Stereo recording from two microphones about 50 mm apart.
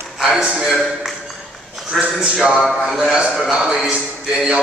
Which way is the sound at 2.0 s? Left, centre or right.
Right.